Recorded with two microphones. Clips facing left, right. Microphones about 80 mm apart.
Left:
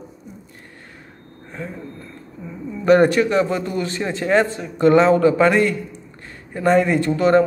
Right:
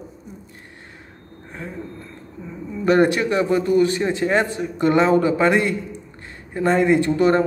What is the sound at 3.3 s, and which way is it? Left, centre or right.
Speech, right.